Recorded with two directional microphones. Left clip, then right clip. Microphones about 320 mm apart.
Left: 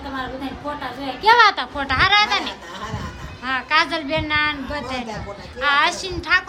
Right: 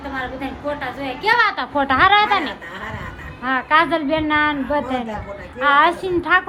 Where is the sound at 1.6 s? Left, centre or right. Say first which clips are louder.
Right 4 dB; centre.